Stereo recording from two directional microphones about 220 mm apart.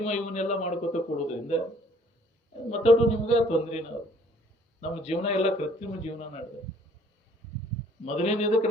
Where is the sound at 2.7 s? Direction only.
30° left (ahead or behind).